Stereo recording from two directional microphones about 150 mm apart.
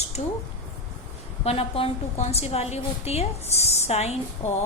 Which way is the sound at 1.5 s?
40° left (ahead or behind).